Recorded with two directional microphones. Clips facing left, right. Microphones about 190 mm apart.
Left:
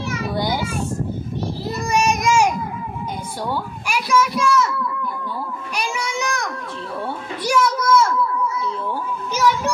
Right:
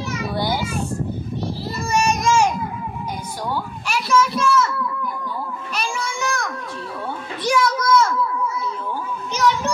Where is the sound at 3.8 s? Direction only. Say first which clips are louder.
Even; 10° left (ahead or behind).